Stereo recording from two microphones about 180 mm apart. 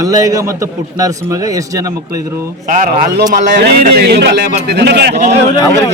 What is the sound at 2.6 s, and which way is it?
Speech, 45° right (ahead or behind).